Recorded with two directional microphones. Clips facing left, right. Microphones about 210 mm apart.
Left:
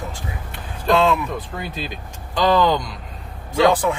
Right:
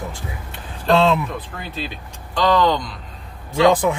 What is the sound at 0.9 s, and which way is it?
Speech, 25° right (ahead or behind).